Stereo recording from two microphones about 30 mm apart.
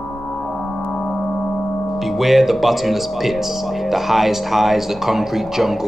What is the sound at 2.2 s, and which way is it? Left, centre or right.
Speech, centre.